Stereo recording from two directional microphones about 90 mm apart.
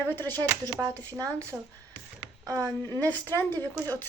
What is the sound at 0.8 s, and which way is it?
Speech, 40° right (ahead or behind).